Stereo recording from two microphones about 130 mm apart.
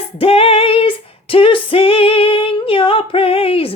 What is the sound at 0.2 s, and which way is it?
Female singing, 50° left (ahead or behind).